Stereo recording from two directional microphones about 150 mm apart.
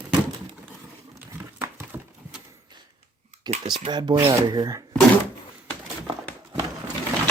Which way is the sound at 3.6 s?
30° right (ahead or behind).